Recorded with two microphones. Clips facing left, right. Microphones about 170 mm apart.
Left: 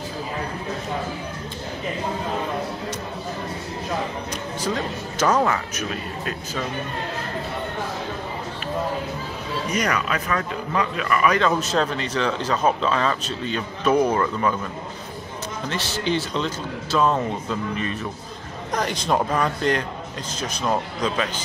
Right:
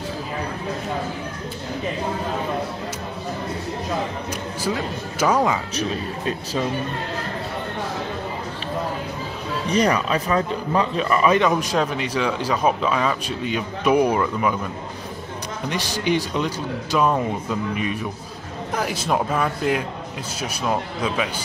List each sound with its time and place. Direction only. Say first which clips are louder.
4.6 s speech: even; 10° right (ahead or behind)
5.8 s a man's voice: right 4 dB; 30° right (ahead or behind)
9.7 s speech: right 5 dB; 30° right (ahead or behind)
11.4 s speech: right 1 dB; 10° right (ahead or behind)
15.7 s speech: right 2 dB; 15° right (ahead or behind)